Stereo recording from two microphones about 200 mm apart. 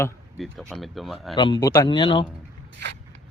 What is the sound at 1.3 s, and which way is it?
Speech, 20° left (ahead or behind).